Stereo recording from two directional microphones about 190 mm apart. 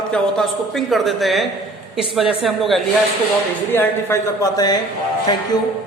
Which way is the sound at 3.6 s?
15° left (ahead or behind).